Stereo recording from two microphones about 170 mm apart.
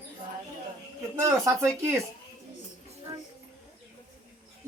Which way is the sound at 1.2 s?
20° right (ahead or behind).